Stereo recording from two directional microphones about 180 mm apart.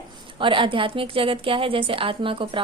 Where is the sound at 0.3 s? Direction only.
30° right (ahead or behind).